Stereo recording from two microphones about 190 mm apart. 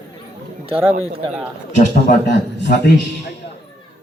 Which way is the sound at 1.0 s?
30° right (ahead or behind).